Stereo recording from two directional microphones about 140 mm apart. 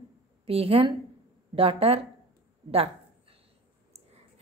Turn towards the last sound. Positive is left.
turn(degrees=-45)  # may be behind; listen again after turning